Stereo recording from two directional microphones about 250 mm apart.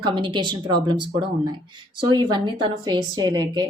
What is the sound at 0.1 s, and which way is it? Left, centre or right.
A woman's voice, centre.